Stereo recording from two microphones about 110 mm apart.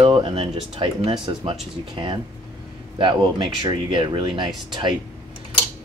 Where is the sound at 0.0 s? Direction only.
55° right (ahead or behind).